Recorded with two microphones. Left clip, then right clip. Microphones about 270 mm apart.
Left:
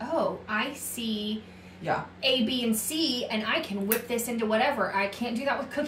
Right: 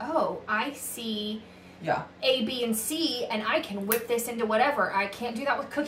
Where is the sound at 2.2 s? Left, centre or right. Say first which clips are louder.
Left 1 dB; centre.